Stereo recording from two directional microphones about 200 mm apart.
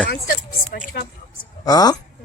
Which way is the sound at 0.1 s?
50° left (ahead or behind).